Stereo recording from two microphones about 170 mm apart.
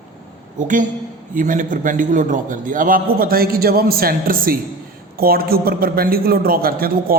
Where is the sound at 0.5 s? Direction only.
50° right (ahead or behind).